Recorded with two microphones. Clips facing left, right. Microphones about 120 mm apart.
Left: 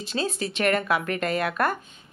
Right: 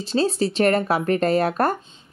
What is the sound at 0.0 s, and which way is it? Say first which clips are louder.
Speech: right 7 dB; 30° right (ahead or behind).